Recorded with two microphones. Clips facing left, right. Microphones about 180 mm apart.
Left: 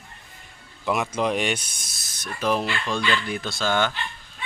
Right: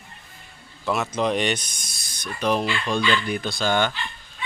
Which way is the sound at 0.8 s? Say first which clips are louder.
Even; 15° left (ahead or behind).